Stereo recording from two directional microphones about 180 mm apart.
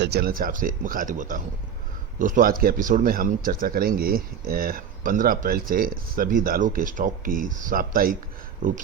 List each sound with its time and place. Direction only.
0.0 s speech: 65° right (ahead or behind)